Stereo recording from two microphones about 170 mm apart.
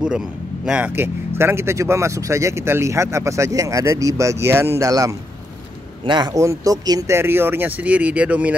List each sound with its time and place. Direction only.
0.7 s speech: 10° right (ahead or behind)